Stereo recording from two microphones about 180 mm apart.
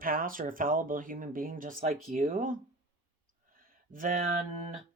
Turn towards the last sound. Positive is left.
turn(degrees=-50)  # may be behind; listen again after turning